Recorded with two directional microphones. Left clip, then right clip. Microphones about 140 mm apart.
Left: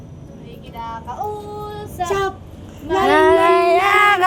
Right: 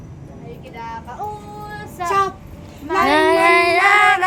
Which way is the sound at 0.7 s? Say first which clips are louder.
Left 2 dB; 50° left (ahead or behind).